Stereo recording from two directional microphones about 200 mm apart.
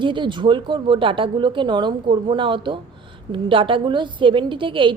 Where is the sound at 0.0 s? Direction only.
25° right (ahead or behind).